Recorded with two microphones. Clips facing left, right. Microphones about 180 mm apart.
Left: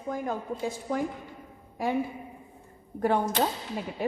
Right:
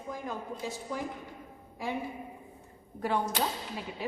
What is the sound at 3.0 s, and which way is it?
Speech, 50° left (ahead or behind).